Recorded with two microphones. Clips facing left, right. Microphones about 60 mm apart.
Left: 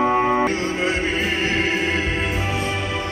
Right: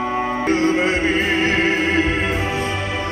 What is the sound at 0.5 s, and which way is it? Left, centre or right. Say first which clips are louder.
Music: right 5 dB; right.